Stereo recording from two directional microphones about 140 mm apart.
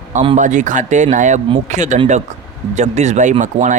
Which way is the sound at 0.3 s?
60° right (ahead or behind).